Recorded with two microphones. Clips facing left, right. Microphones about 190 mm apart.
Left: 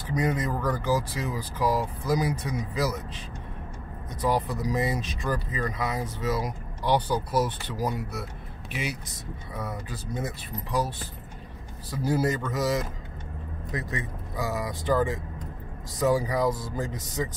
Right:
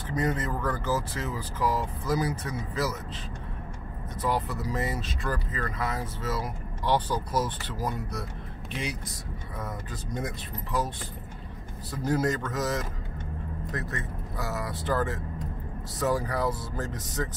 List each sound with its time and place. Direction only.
0.1 s speech: 15° left (ahead or behind)
4.2 s speech: 15° left (ahead or behind)
11.9 s speech: 10° left (ahead or behind)